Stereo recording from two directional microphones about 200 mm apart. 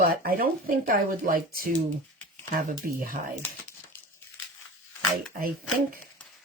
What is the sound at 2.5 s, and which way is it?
Speech, 45° right (ahead or behind).